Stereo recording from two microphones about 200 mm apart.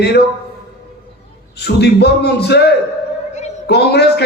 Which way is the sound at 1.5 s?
55° left (ahead or behind).